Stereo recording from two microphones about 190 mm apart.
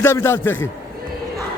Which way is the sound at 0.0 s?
15° left (ahead or behind).